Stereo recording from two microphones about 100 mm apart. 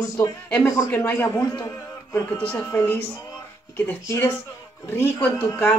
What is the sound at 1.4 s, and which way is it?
Speech, 35° left (ahead or behind).